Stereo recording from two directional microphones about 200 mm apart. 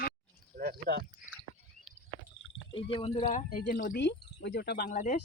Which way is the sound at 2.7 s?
25° left (ahead or behind).